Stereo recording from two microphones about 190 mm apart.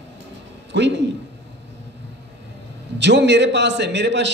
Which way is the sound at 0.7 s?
65° right (ahead or behind).